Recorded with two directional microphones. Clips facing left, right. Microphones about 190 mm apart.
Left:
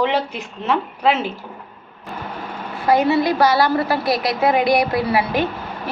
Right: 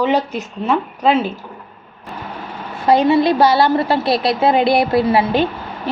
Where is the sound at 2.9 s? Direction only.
25° right (ahead or behind).